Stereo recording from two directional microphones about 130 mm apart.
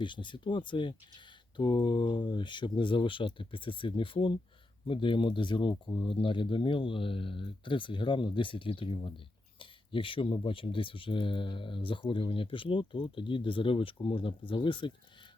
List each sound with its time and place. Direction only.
0.0 s speech: 40° left (ahead or behind)